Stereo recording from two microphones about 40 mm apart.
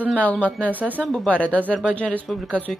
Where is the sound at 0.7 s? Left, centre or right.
Right.